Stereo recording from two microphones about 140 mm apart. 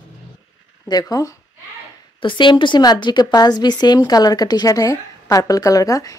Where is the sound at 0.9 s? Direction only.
30° left (ahead or behind).